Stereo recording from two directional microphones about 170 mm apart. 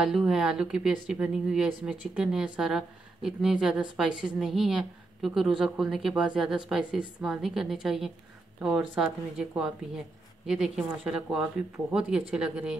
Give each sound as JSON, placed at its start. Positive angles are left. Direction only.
{"t": 0.0, "sound": "a woman's voice", "side_deg": -5}